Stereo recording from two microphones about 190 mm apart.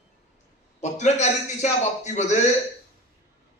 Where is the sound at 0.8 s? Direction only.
35° left (ahead or behind).